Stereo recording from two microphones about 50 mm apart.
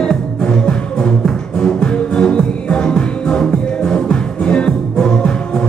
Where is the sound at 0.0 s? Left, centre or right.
Centre.